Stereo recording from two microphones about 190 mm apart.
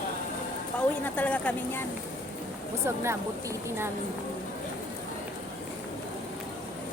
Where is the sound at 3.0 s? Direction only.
15° right (ahead or behind).